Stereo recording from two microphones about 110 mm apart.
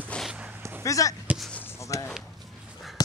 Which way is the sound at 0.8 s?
30° left (ahead or behind).